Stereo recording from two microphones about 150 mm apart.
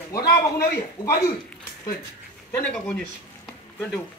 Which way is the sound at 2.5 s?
10° left (ahead or behind).